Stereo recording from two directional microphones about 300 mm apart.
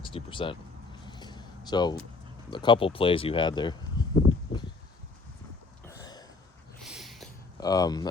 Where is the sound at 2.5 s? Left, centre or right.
Centre.